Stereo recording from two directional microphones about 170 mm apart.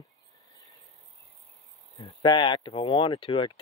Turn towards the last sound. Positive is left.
turn(degrees=30)  # may be behind; listen again after turning